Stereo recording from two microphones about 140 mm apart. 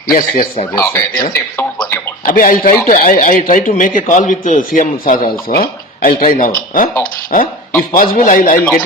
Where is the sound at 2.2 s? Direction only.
80° left.